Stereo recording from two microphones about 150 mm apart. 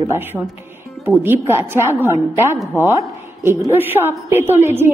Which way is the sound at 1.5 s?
15° right (ahead or behind).